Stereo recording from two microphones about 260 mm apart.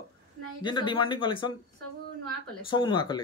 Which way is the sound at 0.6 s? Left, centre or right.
Centre.